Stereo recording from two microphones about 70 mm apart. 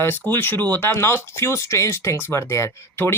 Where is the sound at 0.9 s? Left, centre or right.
Left.